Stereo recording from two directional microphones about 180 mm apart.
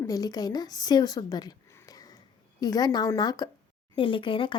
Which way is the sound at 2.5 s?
20° left (ahead or behind).